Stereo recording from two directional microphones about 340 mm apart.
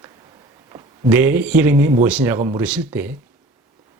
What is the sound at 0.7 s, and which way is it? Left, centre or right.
Speech, centre.